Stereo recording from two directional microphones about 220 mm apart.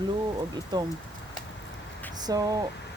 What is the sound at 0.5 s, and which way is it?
Speech, 20° right (ahead or behind).